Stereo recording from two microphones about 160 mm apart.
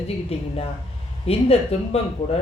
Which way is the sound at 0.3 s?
35° left (ahead or behind).